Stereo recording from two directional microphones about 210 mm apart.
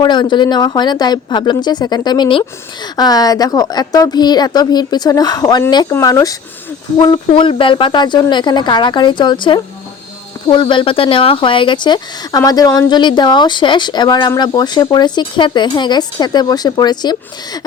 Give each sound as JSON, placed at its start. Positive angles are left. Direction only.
{"t": 0.0, "sound": "speech", "side_deg": 20}